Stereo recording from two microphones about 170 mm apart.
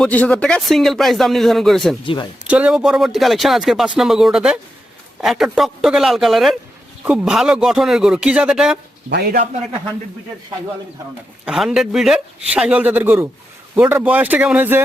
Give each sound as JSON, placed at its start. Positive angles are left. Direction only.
{"t": 0.0, "sound": "speech", "side_deg": 5}
{"t": 9.0, "sound": "a man's voice", "side_deg": -65}
{"t": 11.4, "sound": "speech", "side_deg": 0}